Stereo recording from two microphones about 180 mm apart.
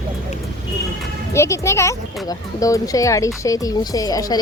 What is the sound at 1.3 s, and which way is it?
Speech, 15° left (ahead or behind).